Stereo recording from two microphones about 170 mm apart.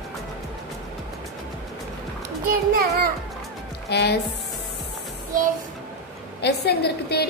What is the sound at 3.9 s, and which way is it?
Speech, 75° left (ahead or behind).